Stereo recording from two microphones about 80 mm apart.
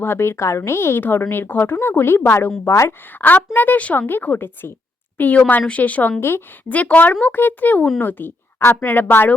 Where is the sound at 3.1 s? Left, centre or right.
Left.